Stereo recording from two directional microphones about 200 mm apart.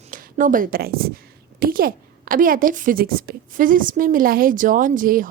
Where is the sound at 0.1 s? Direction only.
40° right (ahead or behind).